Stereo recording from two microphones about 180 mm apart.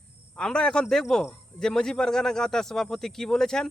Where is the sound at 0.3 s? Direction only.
5° left (ahead or behind).